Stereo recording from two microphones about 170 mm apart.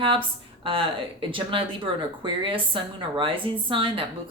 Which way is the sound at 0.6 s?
30° right (ahead or behind).